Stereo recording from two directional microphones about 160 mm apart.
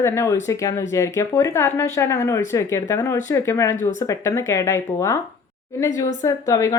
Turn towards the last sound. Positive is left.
turn(degrees=20)  # may be behind; listen again after turning